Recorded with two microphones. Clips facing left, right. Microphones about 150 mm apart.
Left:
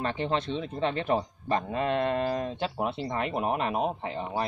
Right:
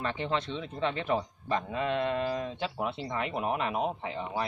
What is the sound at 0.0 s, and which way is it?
A man's voice, 35° left (ahead or behind).